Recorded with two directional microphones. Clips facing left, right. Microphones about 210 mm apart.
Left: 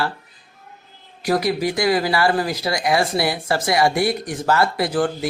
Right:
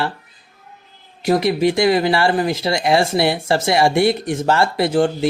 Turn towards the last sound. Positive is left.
turn(degrees=-25)  # may be behind; listen again after turning